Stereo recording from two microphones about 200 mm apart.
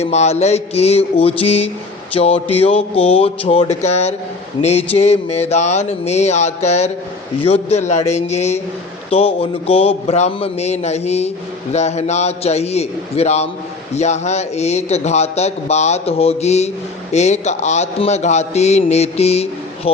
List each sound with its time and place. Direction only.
0.0 s a man's voice: 35° left (ahead or behind)